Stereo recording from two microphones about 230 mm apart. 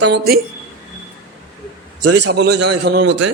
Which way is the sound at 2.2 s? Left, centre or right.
Right.